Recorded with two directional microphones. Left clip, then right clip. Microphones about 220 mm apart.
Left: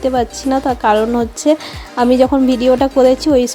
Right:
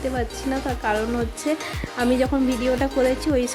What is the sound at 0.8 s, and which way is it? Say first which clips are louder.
Speech: left 10 dB; 35° left (ahead or behind).